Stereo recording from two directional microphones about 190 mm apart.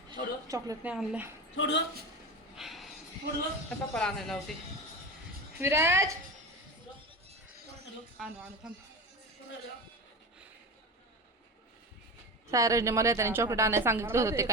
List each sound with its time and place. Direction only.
0.1 s a woman's voice: 20° right (ahead or behind)
1.5 s speech: 70° left (ahead or behind)
2.6 s a sound: centre (ahead or behind)
3.7 s speech: 5° left (ahead or behind)
5.5 s a woman's voice: 15° right (ahead or behind)
8.2 s speech: 5° right (ahead or behind)
12.5 s a woman's voice: 15° right (ahead or behind)